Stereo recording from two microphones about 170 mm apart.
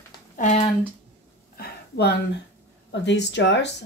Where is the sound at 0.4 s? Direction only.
50° left (ahead or behind).